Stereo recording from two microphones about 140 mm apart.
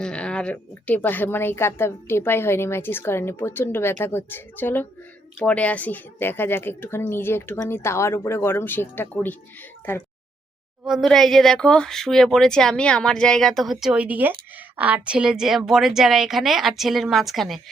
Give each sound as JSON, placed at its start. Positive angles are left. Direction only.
{"t": 0.0, "sound": "a woman's voice", "side_deg": 5}
{"t": 10.8, "sound": "speech", "side_deg": 0}